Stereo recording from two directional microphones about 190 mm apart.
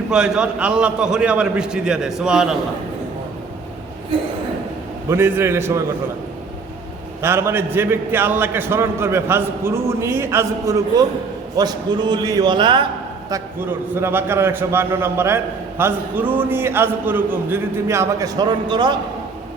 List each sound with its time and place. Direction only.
0.1 s a man's voice: 5° right (ahead or behind)
5.0 s a man's voice: 10° right (ahead or behind)
7.2 s a man's voice: 10° right (ahead or behind)
13.3 s a man's voice: 10° right (ahead or behind)